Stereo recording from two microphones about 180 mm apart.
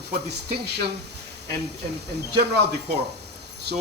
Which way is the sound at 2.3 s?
65° right (ahead or behind).